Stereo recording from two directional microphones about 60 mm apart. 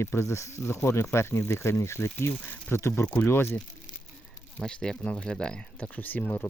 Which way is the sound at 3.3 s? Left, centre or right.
Left.